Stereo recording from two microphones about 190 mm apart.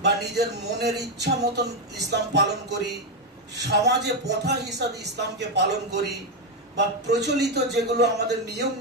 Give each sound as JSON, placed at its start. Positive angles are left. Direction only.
{"t": 0.0, "sound": "speech", "side_deg": -60}
{"t": 7.1, "sound": "speech", "side_deg": -60}